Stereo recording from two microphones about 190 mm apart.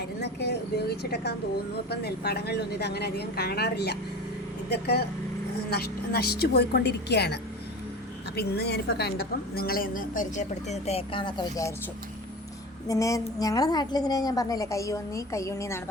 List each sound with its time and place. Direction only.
0.2 s speech: 60° left (ahead or behind)
8.4 s a woman's voice: 60° left (ahead or behind); by 11.7 s 20° left (ahead or behind)
12.9 s a woman's voice: 15° left (ahead or behind)